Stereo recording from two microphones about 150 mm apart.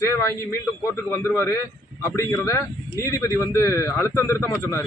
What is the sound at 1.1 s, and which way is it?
A man's voice, 15° left (ahead or behind).